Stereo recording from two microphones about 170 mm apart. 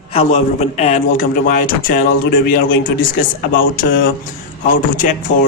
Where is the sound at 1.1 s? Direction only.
55° left (ahead or behind).